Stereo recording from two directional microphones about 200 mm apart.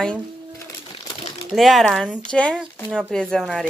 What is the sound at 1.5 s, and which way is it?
Speech, centre (ahead or behind).